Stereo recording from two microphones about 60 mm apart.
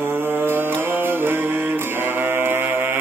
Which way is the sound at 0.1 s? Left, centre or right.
Right.